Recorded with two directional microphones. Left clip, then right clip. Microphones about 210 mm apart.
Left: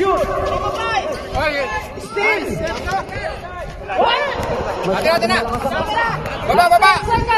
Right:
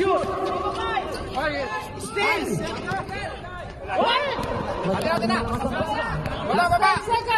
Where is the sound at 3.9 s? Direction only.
45° right (ahead or behind).